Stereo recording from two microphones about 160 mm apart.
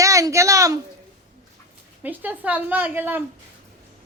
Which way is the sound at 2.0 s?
10° right (ahead or behind).